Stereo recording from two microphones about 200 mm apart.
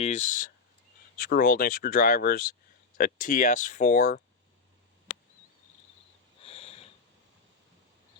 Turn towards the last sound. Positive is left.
turn(degrees=30)  # may be behind; listen again after turning